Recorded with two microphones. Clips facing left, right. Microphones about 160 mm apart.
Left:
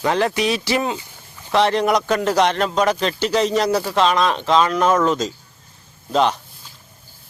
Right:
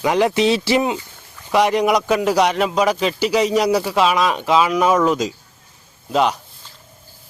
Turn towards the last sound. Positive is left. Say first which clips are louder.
# even
turn(degrees=-5)  # may be behind; listen again after turning